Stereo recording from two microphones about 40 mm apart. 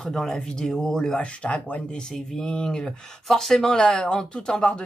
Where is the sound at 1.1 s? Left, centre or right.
Left.